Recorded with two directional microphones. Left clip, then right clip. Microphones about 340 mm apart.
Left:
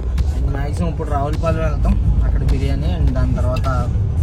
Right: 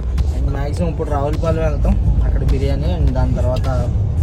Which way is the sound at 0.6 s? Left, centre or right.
Centre.